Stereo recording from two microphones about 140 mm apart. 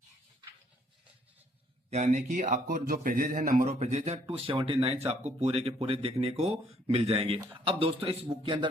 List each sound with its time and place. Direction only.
1.9 s a man's voice: 55° right (ahead or behind); by 3.7 s 75° right (ahead or behind)
3.7 s a man's voice: 50° right (ahead or behind)